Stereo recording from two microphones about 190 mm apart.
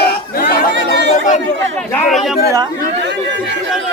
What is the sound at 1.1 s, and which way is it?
Chatter, 40° left (ahead or behind).